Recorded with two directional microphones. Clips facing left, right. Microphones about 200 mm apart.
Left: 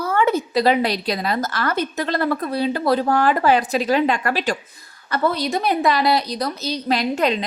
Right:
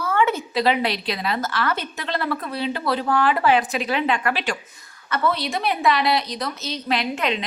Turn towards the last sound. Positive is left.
turn(degrees=40)  # may be behind; listen again after turning